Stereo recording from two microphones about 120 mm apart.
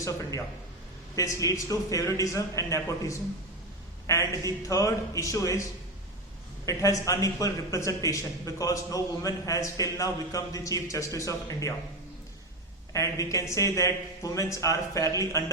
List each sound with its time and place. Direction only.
0.0 s speech: 25° left (ahead or behind)
6.7 s speech: 25° left (ahead or behind)
12.9 s speech: 25° left (ahead or behind)